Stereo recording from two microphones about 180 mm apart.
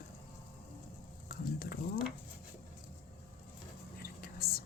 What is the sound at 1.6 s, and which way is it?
Speech, 60° left (ahead or behind).